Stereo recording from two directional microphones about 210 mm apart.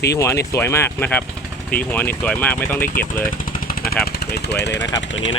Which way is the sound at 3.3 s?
45° left (ahead or behind).